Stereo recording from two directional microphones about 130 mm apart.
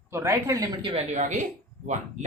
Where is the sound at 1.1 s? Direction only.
70° right (ahead or behind).